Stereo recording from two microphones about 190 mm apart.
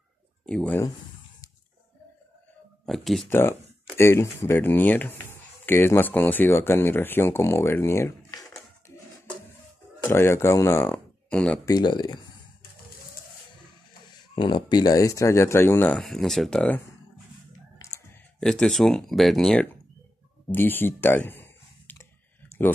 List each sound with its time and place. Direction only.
0.5 s speech: 5° left (ahead or behind)
2.8 s speech: centre (ahead or behind)
3.3 s speech: 10° left (ahead or behind)
10.0 s speech: 15° left (ahead or behind)
11.6 s speech: 20° left (ahead or behind)
14.3 s speech: 20° left (ahead or behind); by 16.8 s 5° left (ahead or behind)
18.4 s speech: 5° left (ahead or behind)
20.5 s a sound: 10° left (ahead or behind)